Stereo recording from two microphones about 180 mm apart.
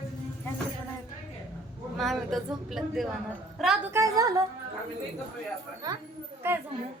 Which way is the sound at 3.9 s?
15° right (ahead or behind).